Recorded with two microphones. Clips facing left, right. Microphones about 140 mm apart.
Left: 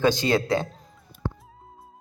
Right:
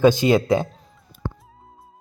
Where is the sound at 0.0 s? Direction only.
15° right (ahead or behind).